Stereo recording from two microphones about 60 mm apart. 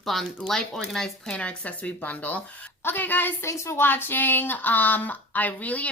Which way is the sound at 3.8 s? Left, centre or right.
Left.